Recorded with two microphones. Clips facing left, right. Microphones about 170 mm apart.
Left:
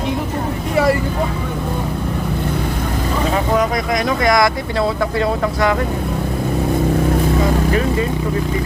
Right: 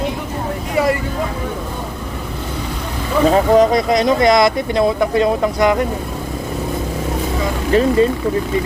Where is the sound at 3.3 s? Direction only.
30° right (ahead or behind).